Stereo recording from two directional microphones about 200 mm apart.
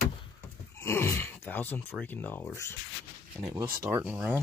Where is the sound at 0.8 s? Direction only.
10° left (ahead or behind).